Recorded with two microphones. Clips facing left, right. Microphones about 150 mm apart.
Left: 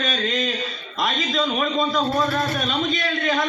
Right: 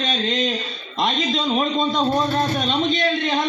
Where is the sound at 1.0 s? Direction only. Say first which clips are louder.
Right 1 dB; 25° right (ahead or behind).